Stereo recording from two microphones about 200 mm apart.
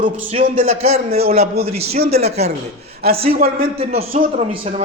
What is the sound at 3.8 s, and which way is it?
Speech, 30° right (ahead or behind).